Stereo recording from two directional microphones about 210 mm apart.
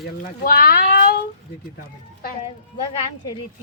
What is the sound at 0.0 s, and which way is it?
Speech, 45° left (ahead or behind).